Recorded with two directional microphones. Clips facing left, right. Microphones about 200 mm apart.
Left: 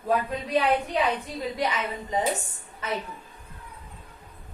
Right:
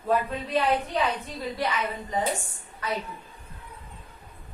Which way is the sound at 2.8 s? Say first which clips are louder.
Even; 25° left (ahead or behind).